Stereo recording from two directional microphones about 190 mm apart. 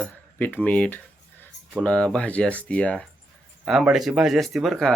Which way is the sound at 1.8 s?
5° left (ahead or behind).